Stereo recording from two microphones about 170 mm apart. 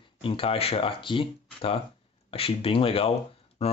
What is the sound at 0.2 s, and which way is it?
Speech, 35° left (ahead or behind).